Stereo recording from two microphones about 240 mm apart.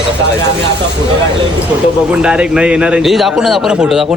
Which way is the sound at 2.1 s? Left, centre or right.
Centre.